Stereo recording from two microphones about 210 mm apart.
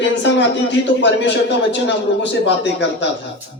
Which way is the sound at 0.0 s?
55° left (ahead or behind).